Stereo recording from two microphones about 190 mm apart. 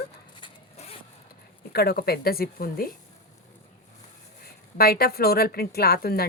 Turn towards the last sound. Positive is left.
turn(degrees=55)  # may be behind; listen again after turning